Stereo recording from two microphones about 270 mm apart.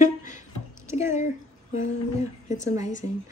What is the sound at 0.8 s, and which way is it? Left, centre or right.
Speech, centre.